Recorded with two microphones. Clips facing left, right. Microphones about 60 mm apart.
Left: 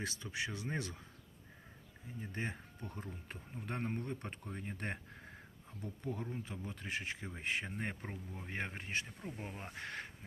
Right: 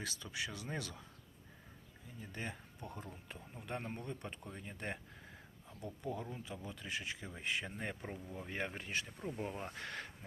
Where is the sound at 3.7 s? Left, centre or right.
Left.